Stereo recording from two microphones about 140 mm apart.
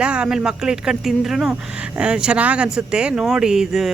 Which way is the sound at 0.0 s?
5° right (ahead or behind).